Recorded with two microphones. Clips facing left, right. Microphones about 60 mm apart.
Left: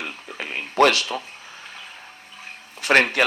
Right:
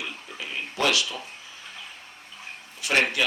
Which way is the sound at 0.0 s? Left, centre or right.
Left.